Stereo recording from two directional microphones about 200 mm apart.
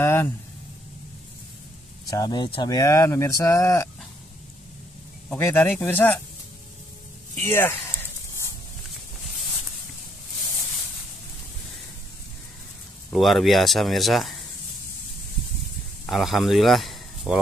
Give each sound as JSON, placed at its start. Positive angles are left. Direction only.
{"t": 0.0, "sound": "speech", "side_deg": 15}
{"t": 2.0, "sound": "speech", "side_deg": 20}
{"t": 5.3, "sound": "speech", "side_deg": 10}
{"t": 7.4, "sound": "speech", "side_deg": 10}
{"t": 13.1, "sound": "speech", "side_deg": 0}
{"t": 16.1, "sound": "speech", "side_deg": 0}